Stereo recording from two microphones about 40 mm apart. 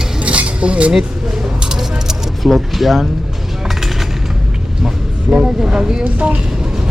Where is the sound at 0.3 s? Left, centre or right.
Right.